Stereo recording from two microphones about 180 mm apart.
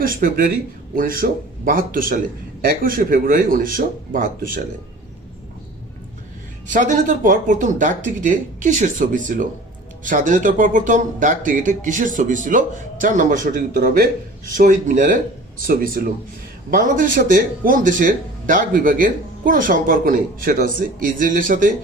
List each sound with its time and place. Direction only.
0.0 s speech: 50° right (ahead or behind)
6.7 s speech: 45° right (ahead or behind)